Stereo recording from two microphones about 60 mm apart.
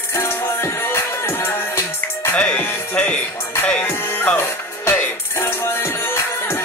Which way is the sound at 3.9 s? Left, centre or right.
Left.